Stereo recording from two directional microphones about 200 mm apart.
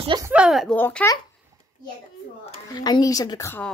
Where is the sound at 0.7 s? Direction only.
10° left (ahead or behind).